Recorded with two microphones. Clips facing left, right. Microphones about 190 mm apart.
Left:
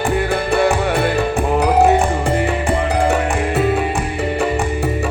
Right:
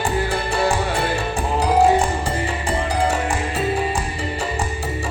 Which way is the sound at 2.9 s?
60° left (ahead or behind).